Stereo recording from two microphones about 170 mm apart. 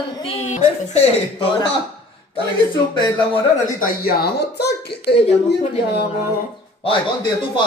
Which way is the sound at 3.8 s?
65° left (ahead or behind).